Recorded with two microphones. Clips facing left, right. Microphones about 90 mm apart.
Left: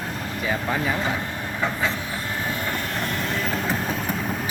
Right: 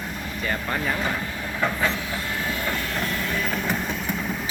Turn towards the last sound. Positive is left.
turn(degrees=40)  # may be behind; listen again after turning